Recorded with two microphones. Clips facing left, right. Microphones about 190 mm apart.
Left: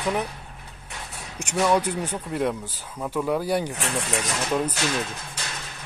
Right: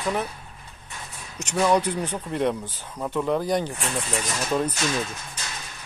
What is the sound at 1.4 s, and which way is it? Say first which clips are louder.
Speech: right 1 dB; 5° left (ahead or behind).